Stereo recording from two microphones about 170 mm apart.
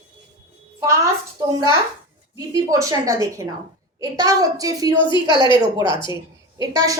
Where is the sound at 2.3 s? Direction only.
20° right (ahead or behind).